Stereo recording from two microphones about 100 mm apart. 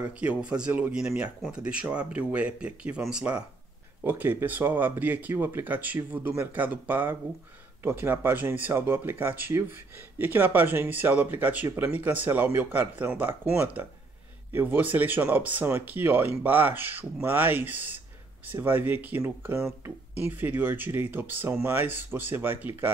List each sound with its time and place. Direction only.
0.2 s speech: 10° right (ahead or behind)
4.0 s speech: 20° right (ahead or behind)